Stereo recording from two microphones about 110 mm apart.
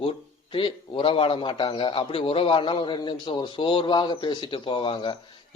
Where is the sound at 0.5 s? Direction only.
55° left (ahead or behind).